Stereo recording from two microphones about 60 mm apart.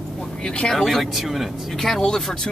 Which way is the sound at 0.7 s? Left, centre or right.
Centre.